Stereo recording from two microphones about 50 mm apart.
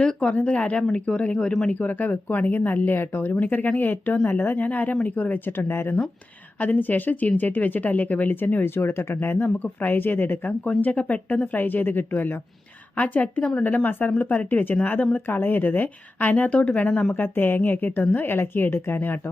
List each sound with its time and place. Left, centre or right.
0.0 s speech: left
1.7 s a woman's voice: left
4.6 s speech: left
5.5 s a woman's voice: left
6.6 s speech: left
10.7 s speech: left
13.0 s speech: left
17.2 s a woman's voice: left